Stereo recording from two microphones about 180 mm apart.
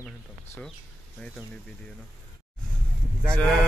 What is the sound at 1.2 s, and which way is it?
Speech, centre (ahead or behind).